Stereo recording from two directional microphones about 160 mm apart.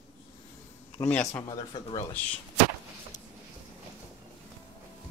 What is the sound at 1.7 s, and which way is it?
Speech, 30° left (ahead or behind).